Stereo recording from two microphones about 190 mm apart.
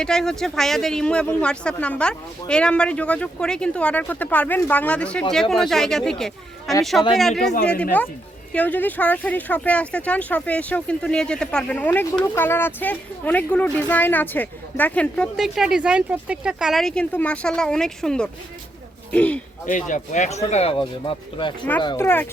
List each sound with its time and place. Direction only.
0.0 s speech: 5° left (ahead or behind)
8.5 s speech: 10° left (ahead or behind)
19.6 s speech: 40° left (ahead or behind); by 22.0 s 25° left (ahead or behind)
22.0 s speech: 10° left (ahead or behind)